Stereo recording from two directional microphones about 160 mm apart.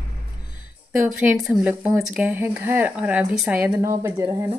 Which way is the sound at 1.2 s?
5° right (ahead or behind).